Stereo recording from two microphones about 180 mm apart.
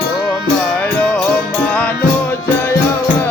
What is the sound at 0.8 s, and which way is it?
Music, 10° left (ahead or behind).